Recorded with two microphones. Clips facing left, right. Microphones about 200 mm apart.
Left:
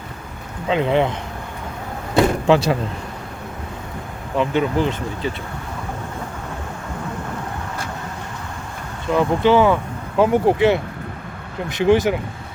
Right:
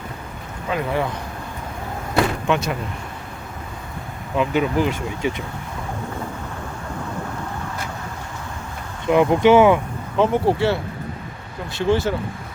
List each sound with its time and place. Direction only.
0.7 s speech: 25° left (ahead or behind)
2.1 s door: 30° left (ahead or behind)
4.4 s speech: 10° right (ahead or behind)
9.0 s speech: 15° right (ahead or behind)
10.2 s speech: 15° left (ahead or behind)